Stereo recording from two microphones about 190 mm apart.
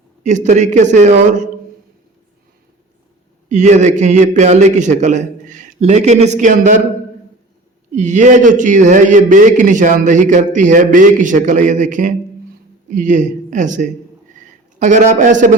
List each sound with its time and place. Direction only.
0.2 s a man's voice: 40° right (ahead or behind)
3.5 s a man's voice: 40° right (ahead or behind)
7.9 s a man's voice: 40° right (ahead or behind)